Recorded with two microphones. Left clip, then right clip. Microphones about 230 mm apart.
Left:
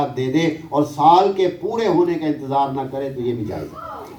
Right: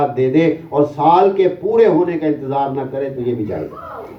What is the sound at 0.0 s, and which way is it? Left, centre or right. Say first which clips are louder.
A man's voice: right 6 dB; left.